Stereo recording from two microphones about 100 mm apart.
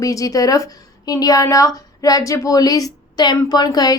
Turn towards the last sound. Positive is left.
turn(degrees=40)  # may be behind; listen again after turning